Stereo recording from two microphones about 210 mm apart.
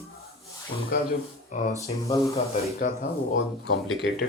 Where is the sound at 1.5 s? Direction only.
35° left (ahead or behind).